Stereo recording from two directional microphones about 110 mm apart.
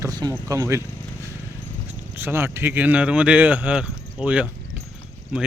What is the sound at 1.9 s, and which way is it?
Speech, 20° right (ahead or behind).